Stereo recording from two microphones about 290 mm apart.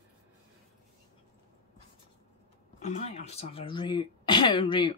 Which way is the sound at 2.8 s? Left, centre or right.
Left.